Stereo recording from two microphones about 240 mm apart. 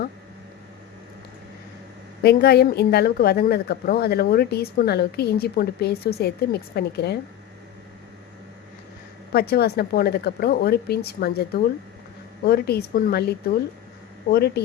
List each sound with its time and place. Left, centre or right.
2.2 s a woman's voice: left
9.3 s a woman's voice: left